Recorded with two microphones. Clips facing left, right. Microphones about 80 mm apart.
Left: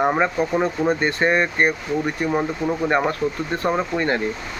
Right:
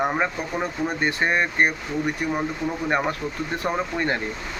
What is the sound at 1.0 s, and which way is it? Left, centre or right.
Speech, centre.